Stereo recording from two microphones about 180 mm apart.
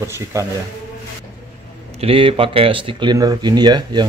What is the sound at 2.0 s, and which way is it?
Speech, 30° right (ahead or behind).